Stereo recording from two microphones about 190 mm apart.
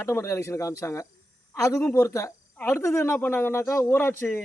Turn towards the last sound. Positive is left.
turn(degrees=10)  # may be behind; listen again after turning